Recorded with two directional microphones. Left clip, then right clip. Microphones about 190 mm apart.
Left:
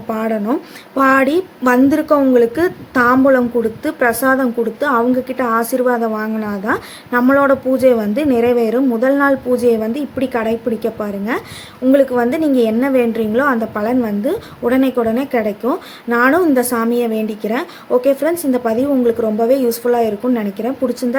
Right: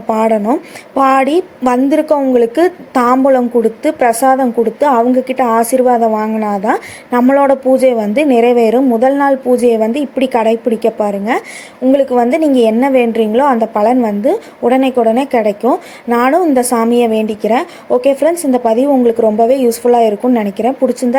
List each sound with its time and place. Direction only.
0.1 s a woman's voice: 20° right (ahead or behind)